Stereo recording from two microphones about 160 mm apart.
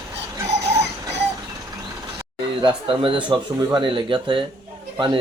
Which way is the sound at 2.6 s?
35° right (ahead or behind).